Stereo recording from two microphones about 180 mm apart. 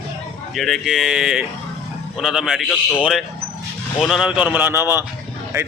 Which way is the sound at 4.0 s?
Centre (ahead or behind).